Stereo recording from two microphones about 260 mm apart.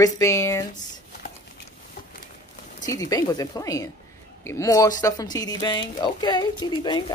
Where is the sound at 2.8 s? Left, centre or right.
Centre.